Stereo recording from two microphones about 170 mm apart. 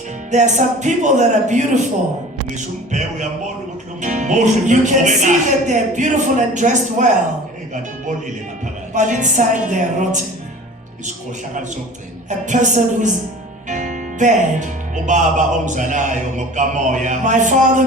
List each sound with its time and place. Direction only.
0.3 s speech: 45° right (ahead or behind)
2.9 s speech: 45° right (ahead or behind)
8.9 s speech: 45° right (ahead or behind)
12.3 s speech: 45° right (ahead or behind)